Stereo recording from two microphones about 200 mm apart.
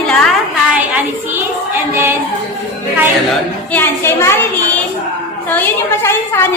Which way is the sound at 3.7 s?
10° left (ahead or behind).